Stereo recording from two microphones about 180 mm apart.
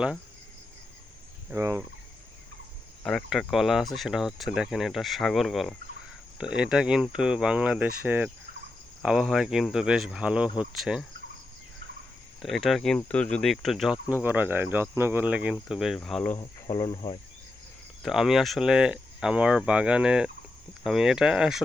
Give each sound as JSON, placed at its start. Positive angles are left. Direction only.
{"t": 1.5, "sound": "speech", "side_deg": -15}
{"t": 3.0, "sound": "speech", "side_deg": 5}
{"t": 12.4, "sound": "speech", "side_deg": 0}
{"t": 16.4, "sound": "speech", "side_deg": 20}
{"t": 18.0, "sound": "speech", "side_deg": 0}